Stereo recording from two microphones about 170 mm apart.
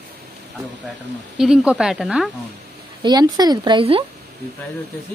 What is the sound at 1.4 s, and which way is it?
Speech, 5° right (ahead or behind).